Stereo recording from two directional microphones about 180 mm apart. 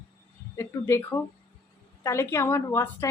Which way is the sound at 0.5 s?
15° left (ahead or behind).